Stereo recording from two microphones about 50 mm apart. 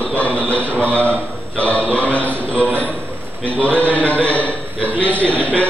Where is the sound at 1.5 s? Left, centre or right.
Left.